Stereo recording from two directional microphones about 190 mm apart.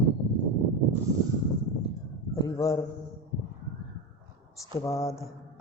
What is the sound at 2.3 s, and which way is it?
Speech, 20° left (ahead or behind).